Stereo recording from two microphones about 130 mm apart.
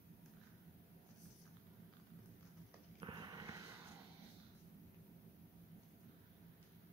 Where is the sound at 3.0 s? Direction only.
35° right (ahead or behind).